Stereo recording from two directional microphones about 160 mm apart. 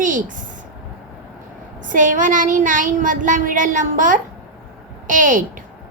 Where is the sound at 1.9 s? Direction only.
55° right (ahead or behind).